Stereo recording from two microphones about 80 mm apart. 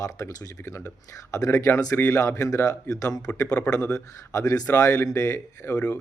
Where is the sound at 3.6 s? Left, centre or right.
Left.